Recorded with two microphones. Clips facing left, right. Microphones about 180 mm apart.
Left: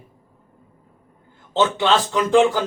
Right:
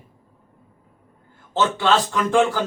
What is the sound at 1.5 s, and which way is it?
Speech, 20° left (ahead or behind).